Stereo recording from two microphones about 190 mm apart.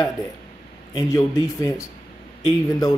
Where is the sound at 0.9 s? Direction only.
20° left (ahead or behind).